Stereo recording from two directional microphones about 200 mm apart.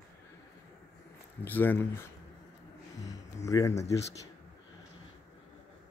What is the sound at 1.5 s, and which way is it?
Speech, 10° left (ahead or behind).